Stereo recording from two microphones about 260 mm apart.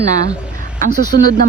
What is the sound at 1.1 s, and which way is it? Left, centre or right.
Speech, right.